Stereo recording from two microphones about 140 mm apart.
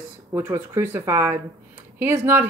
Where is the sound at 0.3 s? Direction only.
15° right (ahead or behind).